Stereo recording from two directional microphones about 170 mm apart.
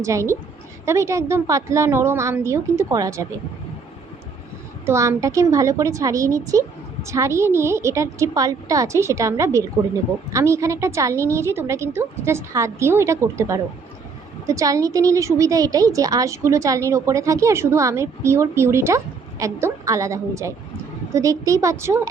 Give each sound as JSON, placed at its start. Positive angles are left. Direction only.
{"t": 0.0, "sound": "a woman's voice", "side_deg": -15}
{"t": 4.9, "sound": "a woman's voice", "side_deg": -15}